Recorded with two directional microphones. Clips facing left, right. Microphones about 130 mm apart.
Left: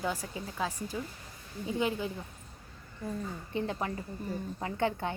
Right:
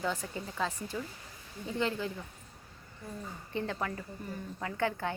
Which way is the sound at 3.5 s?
20° left (ahead or behind).